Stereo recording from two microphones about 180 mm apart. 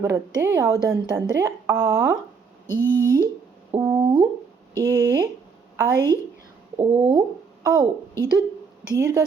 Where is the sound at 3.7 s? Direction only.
20° right (ahead or behind).